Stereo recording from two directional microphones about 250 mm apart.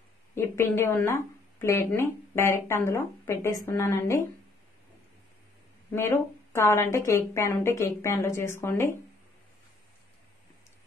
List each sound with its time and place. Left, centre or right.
0.3 s speech: centre
5.9 s a woman's voice: centre